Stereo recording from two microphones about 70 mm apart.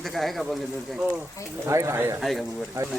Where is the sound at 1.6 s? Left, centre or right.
Right.